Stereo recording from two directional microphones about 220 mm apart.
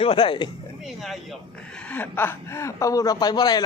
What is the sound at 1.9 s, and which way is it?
Speech, 10° left (ahead or behind).